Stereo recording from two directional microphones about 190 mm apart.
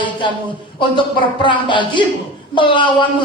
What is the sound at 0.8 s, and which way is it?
A man's voice, 25° left (ahead or behind).